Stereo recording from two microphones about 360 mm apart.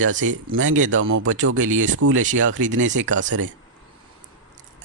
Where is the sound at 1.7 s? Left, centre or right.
Right.